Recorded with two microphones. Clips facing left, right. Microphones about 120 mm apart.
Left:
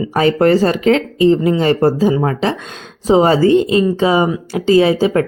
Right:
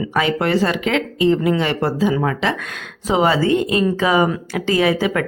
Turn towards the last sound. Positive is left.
turn(degrees=30)  # may be behind; listen again after turning